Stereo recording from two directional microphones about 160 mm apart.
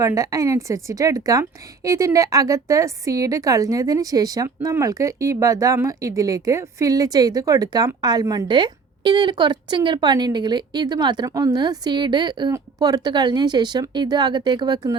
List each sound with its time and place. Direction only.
0.0 s a woman's voice: 20° right (ahead or behind)